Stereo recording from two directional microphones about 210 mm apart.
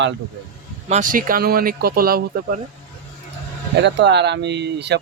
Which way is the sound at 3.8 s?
55° right (ahead or behind).